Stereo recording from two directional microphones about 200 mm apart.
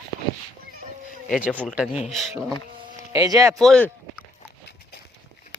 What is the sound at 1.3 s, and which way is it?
Speech, 5° right (ahead or behind).